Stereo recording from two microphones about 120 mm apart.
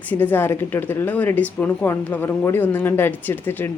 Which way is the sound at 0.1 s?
15° left (ahead or behind).